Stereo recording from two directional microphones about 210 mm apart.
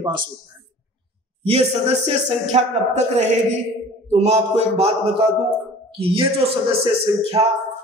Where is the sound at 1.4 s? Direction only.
30° right (ahead or behind).